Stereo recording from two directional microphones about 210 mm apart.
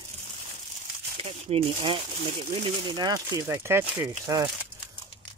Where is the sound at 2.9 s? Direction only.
20° right (ahead or behind).